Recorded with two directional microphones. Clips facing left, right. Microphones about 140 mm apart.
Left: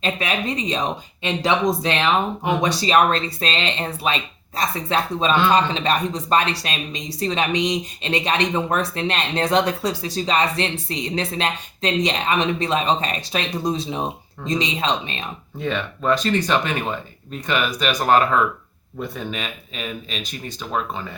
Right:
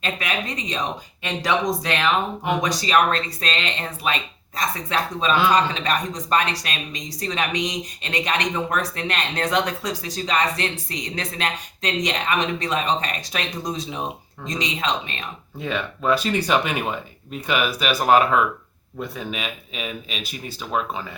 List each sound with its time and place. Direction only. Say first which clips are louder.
0.0 s speech: left 3 dB; 30° left (ahead or behind)
15.6 s speech: left 1 dB; 5° right (ahead or behind)